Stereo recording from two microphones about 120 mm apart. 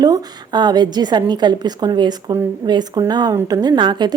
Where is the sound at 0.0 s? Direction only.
35° right (ahead or behind).